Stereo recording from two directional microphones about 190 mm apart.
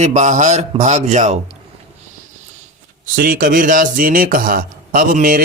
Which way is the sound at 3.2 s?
50° right (ahead or behind).